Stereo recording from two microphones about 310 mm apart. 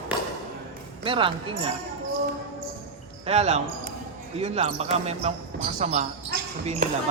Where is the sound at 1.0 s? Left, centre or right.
Centre.